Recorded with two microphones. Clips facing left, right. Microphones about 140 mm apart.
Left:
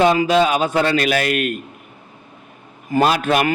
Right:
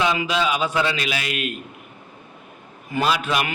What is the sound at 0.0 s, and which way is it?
A man's voice, 45° left (ahead or behind).